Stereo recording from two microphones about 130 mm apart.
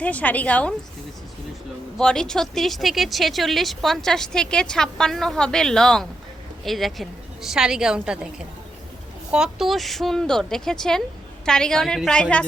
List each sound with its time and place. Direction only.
0.0 s a woman's voice: 10° left (ahead or behind)
2.0 s speech: 5° left (ahead or behind)
9.3 s speech: 5° right (ahead or behind)